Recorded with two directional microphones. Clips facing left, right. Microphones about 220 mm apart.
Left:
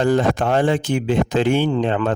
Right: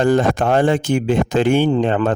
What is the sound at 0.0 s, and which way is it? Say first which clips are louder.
Speech: right 2 dB; 50° right (ahead or behind).